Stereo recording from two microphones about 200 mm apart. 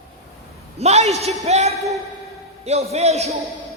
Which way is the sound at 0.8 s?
35° right (ahead or behind).